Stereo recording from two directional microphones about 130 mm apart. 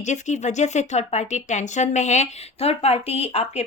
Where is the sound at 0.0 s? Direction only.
65° left (ahead or behind).